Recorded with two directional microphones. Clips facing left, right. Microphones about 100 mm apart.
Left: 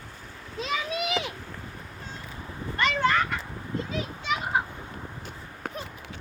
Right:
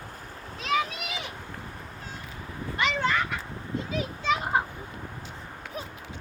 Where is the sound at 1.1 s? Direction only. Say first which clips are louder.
Left 7 dB; 90° left.